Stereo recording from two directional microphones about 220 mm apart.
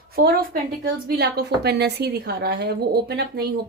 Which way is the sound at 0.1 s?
45° right (ahead or behind).